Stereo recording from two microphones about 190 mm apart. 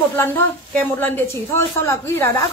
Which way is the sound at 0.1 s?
10° left (ahead or behind).